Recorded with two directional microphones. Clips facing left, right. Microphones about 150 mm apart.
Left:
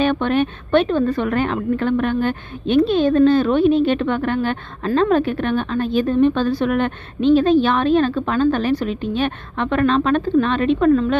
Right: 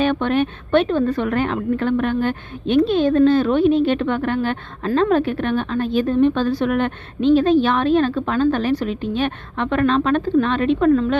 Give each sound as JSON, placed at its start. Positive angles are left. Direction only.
{"t": 0.0, "sound": "a woman's voice", "side_deg": 30}